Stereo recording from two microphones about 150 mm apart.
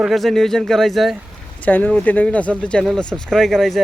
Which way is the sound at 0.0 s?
Centre (ahead or behind).